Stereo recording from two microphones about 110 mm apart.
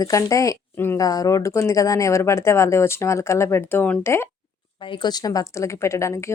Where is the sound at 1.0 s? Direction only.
35° left (ahead or behind).